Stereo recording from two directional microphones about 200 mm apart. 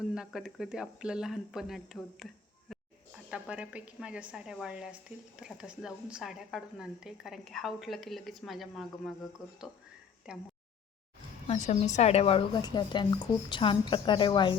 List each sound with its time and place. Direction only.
0.0 s a woman's voice: 5° right (ahead or behind)
2.7 s a sound: centre (ahead or behind)
3.2 s a woman's voice: 5° right (ahead or behind)
11.4 s a woman's voice: 35° left (ahead or behind)